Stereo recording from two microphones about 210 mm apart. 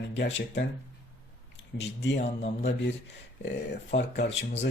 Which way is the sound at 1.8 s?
55° left (ahead or behind).